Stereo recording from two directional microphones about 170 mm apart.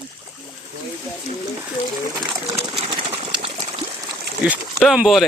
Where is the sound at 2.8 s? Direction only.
35° right (ahead or behind).